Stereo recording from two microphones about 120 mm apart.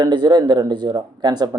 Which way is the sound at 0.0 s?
35° right (ahead or behind).